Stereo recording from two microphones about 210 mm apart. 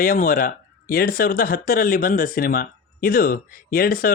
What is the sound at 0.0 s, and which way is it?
A man's voice, 40° left (ahead or behind).